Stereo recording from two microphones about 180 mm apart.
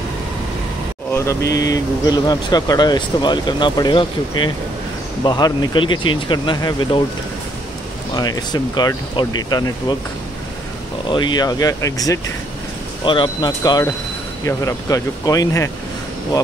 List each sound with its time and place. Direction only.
1.1 s speech: 15° left (ahead or behind)
8.2 s speech: 20° left (ahead or behind)
11.1 s speech: 25° left (ahead or behind)